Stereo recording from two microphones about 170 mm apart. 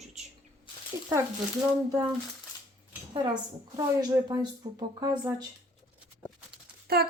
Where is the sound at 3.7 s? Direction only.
20° right (ahead or behind).